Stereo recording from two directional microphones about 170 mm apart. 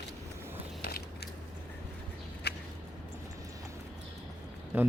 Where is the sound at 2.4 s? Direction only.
75° left (ahead or behind).